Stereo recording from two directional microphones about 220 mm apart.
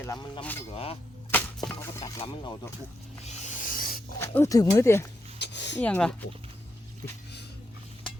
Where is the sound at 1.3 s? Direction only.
10° left (ahead or behind).